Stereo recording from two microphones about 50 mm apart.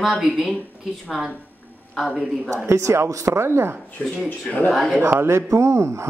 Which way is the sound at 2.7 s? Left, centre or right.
Right.